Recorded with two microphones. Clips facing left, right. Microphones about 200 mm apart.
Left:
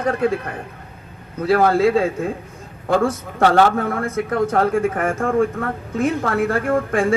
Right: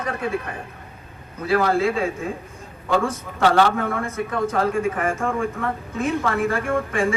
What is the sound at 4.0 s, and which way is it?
A man's voice, 80° left.